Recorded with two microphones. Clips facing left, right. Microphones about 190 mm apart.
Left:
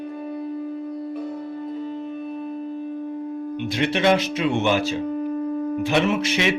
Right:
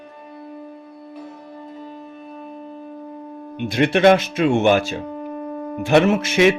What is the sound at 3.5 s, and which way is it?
Music, 50° right (ahead or behind).